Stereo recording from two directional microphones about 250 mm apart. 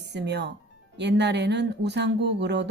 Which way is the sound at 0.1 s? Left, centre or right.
Right.